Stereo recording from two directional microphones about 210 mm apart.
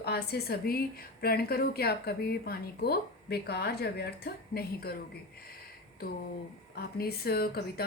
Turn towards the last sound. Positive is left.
turn(degrees=50)  # may be behind; listen again after turning